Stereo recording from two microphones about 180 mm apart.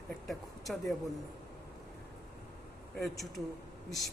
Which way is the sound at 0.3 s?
Centre (ahead or behind).